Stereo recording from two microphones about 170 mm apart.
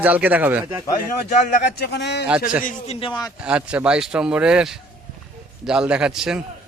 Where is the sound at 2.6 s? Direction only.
35° left (ahead or behind).